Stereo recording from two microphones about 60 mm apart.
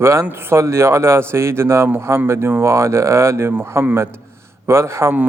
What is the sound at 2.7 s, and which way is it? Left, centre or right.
Speech, right.